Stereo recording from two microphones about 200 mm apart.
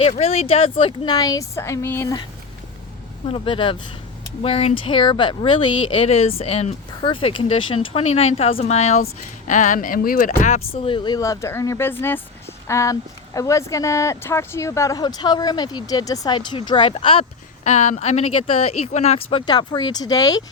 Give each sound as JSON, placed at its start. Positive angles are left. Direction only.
{"t": 0.0, "sound": "speech", "side_deg": 30}
{"t": 3.2, "sound": "speech", "side_deg": 25}